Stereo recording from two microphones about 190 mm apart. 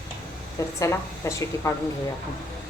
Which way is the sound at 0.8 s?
15° left (ahead or behind).